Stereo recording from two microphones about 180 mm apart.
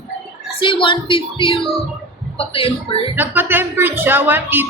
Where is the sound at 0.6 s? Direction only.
25° left (ahead or behind).